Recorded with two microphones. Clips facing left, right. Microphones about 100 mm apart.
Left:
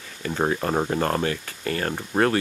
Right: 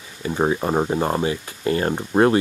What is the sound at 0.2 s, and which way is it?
Speech, 15° right (ahead or behind).